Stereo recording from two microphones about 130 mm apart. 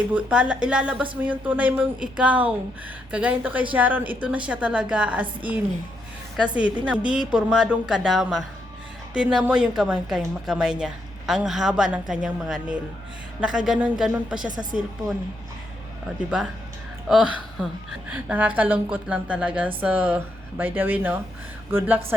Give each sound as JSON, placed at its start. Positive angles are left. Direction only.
{"t": 0.1, "sound": "a woman's voice", "side_deg": -10}
{"t": 17.1, "sound": "a woman's voice", "side_deg": 0}